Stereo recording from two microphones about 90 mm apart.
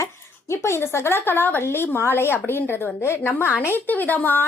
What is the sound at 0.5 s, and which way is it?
Speech, 30° left (ahead or behind).